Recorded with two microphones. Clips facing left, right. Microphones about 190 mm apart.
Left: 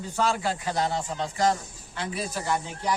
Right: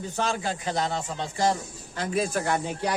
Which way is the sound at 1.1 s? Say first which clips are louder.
Even; 30° right (ahead or behind).